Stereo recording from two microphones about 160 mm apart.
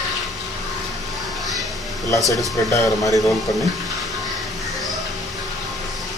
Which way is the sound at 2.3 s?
20° left (ahead or behind).